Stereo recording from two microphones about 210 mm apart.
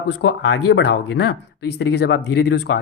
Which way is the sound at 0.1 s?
55° left (ahead or behind).